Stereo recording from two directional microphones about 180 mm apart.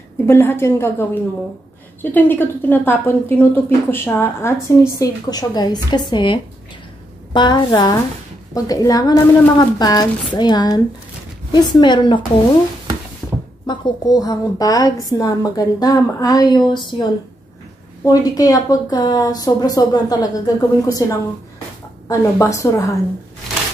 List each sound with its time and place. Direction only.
0.3 s a woman's voice: 15° left (ahead or behind)
13.7 s a woman's voice: 20° left (ahead or behind)
22.0 s a woman's voice: 15° left (ahead or behind)